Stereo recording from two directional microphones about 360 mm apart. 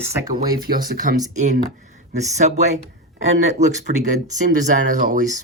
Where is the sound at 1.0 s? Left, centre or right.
Centre.